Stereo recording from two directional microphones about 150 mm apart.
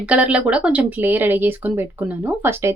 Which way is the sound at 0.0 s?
10° right (ahead or behind).